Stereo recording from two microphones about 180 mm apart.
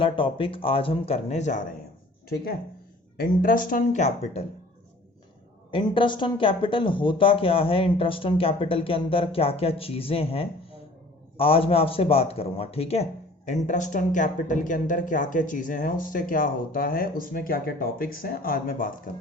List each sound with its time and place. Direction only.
0.0 s speech: 30° left (ahead or behind)
2.3 s a man's voice: 55° left (ahead or behind); by 4.4 s 40° left (ahead or behind)
5.7 s a man's voice: 30° left (ahead or behind); by 18.9 s 50° left (ahead or behind)